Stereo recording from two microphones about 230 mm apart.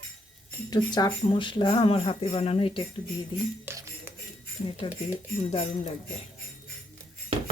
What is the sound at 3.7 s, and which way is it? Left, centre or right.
Music, centre.